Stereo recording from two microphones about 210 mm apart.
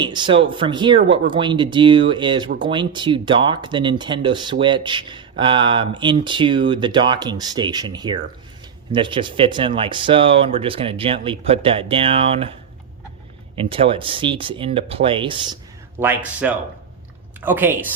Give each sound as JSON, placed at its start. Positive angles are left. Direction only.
{"t": 0.0, "sound": "speech", "side_deg": -20}
{"t": 13.6, "sound": "speech", "side_deg": -25}
{"t": 16.0, "sound": "speech", "side_deg": -10}